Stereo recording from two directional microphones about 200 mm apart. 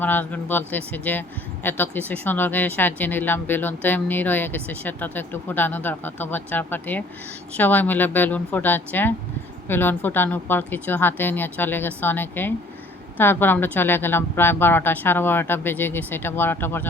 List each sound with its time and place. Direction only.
0.0 s speech: 10° left (ahead or behind)